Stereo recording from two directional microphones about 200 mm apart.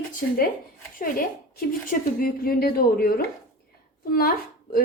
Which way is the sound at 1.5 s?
45° left (ahead or behind).